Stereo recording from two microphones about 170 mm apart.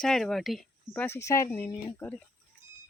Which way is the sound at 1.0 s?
15° left (ahead or behind).